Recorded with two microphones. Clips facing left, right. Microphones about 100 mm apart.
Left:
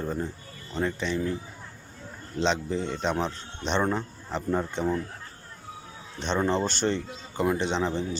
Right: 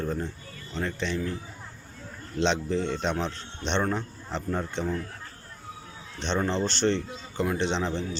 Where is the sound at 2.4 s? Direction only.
5° left (ahead or behind).